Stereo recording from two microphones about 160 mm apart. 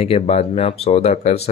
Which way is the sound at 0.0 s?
40° left (ahead or behind).